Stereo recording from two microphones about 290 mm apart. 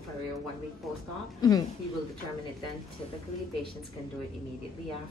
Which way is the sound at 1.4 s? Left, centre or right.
Centre.